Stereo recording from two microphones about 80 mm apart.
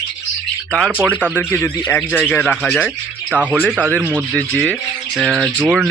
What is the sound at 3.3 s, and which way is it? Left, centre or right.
Speech, centre.